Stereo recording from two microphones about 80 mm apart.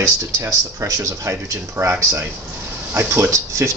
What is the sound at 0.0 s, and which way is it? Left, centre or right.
Speech, right.